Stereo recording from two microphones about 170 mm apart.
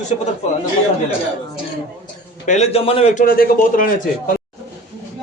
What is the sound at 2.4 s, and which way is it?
A man's voice, 45° left (ahead or behind).